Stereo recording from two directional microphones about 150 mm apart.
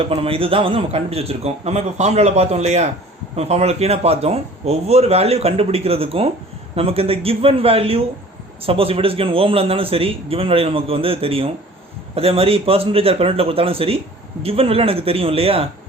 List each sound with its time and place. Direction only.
0.0 s a man's voice: 40° right (ahead or behind)